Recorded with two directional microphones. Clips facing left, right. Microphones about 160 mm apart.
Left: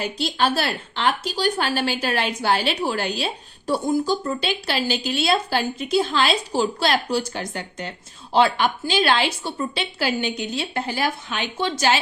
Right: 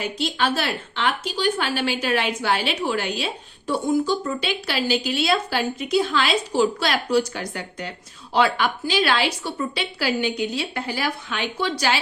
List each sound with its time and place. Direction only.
0.0 s speech: 35° left (ahead or behind)